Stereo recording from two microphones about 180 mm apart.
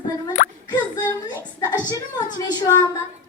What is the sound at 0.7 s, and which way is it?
Plop, 20° left (ahead or behind).